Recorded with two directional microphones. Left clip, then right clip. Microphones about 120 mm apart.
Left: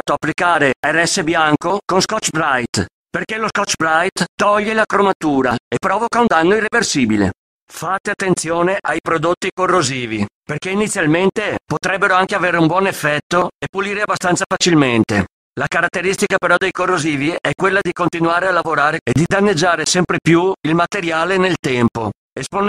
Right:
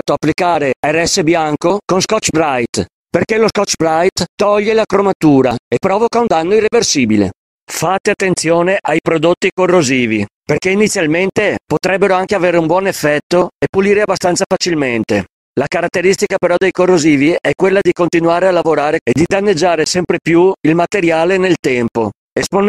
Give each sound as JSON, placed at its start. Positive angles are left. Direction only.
{"t": 0.0, "sound": "speech", "side_deg": -30}
{"t": 3.1, "sound": "speech", "side_deg": -40}